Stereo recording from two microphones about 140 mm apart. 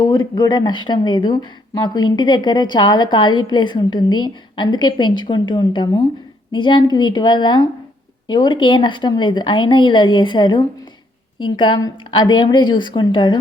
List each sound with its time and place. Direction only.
0.0 s speech: 25° left (ahead or behind)